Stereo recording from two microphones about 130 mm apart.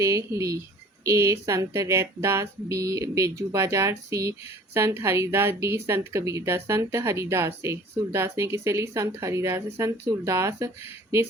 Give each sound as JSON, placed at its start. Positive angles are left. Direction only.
{"t": 0.0, "sound": "speech", "side_deg": -25}